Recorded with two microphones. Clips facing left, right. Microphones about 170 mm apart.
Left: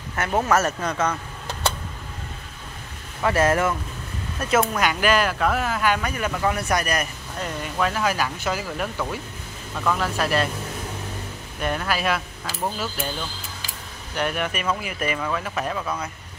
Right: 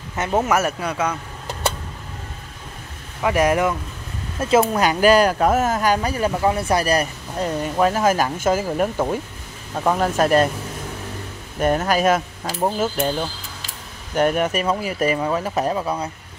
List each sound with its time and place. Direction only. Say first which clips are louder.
0.1 s speech: right 2 dB; 20° right (ahead or behind)
3.2 s speech: right 2 dB; 15° right (ahead or behind)
4.4 s speech: right 4 dB; 25° right (ahead or behind); by 10.5 s 45° right (ahead or behind)
11.6 s speech: right 7 dB; 40° right (ahead or behind)
14.1 s speech: right 7 dB; 45° right (ahead or behind)